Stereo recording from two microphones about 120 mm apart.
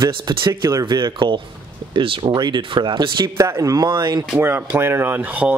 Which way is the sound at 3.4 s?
25° right (ahead or behind).